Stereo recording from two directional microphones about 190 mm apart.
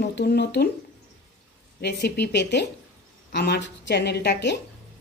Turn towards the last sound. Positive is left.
turn(degrees=65)  # may be behind; listen again after turning